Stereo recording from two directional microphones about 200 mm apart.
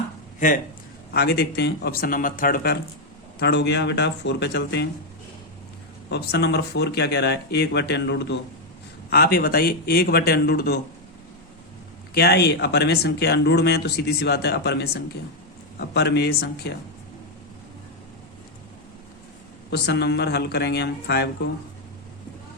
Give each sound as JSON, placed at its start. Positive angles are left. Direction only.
{"t": 0.3, "sound": "speech", "side_deg": 40}
{"t": 1.1, "sound": "speech", "side_deg": 50}
{"t": 3.4, "sound": "speech", "side_deg": 60}
{"t": 6.1, "sound": "speech", "side_deg": 55}
{"t": 12.1, "sound": "speech", "side_deg": 55}
{"t": 19.7, "sound": "speech", "side_deg": 55}